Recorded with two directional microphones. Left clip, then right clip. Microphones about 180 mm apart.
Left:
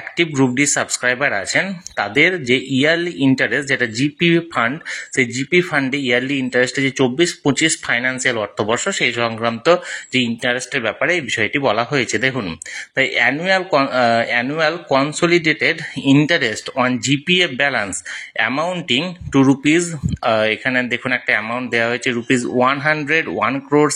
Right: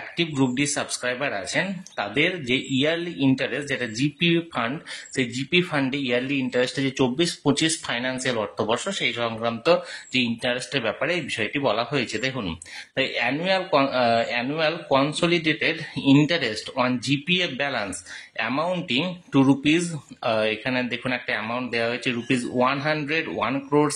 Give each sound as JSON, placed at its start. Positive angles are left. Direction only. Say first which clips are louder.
{"t": 0.2, "sound": "speech", "louder": "left 8 dB", "side_deg": 25}
{"t": 18.4, "sound": "speech", "louder": "left 6 dB", "side_deg": 15}